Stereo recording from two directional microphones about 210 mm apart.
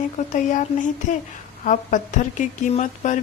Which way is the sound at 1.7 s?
35° left (ahead or behind).